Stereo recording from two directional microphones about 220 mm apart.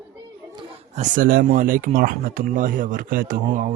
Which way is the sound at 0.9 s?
35° right (ahead or behind).